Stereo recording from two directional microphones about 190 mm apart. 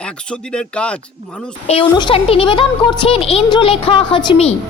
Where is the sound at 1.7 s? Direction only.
30° left (ahead or behind).